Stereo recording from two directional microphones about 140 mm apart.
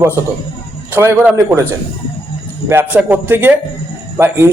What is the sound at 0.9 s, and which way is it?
Speech, 15° right (ahead or behind).